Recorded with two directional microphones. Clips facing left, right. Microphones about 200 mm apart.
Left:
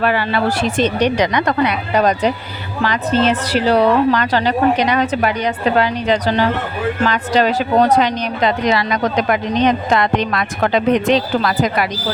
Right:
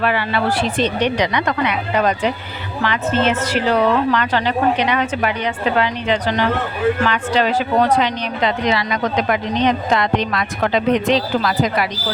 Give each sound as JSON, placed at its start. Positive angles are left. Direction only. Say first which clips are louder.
{"t": 0.0, "sound": "a woman's voice", "louder": "left 2 dB", "side_deg": 40}